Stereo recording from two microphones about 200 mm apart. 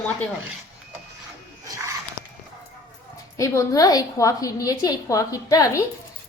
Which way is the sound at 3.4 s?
15° left (ahead or behind).